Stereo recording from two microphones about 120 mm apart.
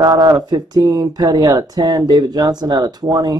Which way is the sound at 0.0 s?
35° right (ahead or behind).